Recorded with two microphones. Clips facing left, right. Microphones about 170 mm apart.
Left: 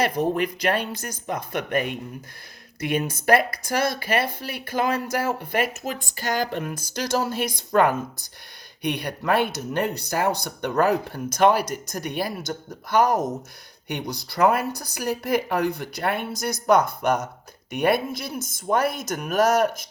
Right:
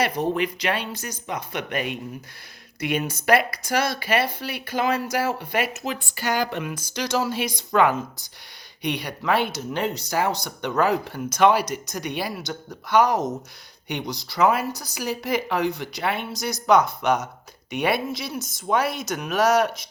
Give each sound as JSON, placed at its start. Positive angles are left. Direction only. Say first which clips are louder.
{"t": 0.0, "sound": "speech", "louder": "left 1 dB", "side_deg": 50}